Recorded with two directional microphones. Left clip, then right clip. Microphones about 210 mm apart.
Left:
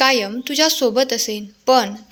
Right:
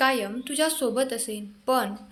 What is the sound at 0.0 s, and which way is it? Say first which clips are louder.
A woman's voice: left 7 dB; 35° left (ahead or behind).